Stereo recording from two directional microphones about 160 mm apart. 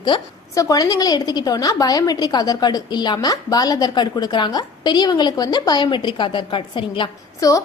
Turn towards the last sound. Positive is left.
turn(degrees=20)  # may be behind; listen again after turning